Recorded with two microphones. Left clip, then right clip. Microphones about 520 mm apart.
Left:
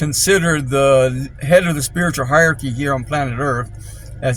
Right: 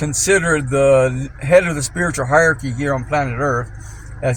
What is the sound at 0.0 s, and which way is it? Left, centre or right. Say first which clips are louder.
Speech: left 1 dB; left.